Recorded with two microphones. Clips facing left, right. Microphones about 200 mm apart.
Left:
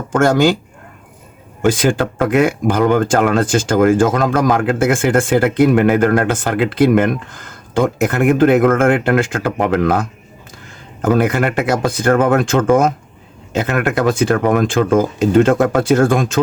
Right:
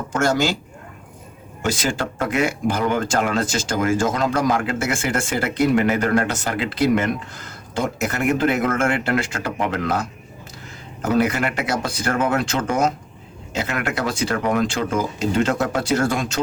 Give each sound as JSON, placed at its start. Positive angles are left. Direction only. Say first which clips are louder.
{"t": 0.1, "sound": "speech", "louder": "left 8 dB", "side_deg": 55}
{"t": 1.6, "sound": "speech", "louder": "left 8 dB", "side_deg": 55}